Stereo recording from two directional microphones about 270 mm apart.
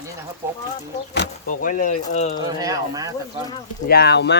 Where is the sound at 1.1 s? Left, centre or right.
Left.